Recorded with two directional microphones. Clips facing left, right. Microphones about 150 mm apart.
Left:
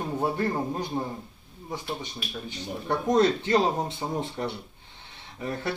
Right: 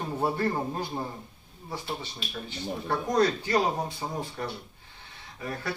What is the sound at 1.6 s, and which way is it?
Speech, 15° left (ahead or behind).